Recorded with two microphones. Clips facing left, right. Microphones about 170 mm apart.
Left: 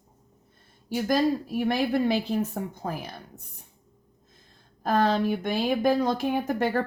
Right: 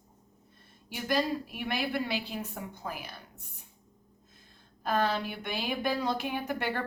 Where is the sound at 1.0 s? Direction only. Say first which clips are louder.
Left 5 dB; 40° left (ahead or behind).